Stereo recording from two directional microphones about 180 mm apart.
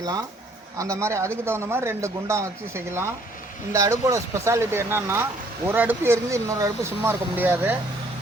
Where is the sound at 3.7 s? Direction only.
20° right (ahead or behind).